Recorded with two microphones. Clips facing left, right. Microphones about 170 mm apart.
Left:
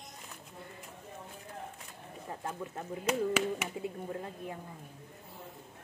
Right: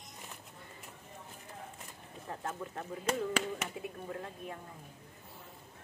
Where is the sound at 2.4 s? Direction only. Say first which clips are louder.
Left 1 dB; 10° left (ahead or behind).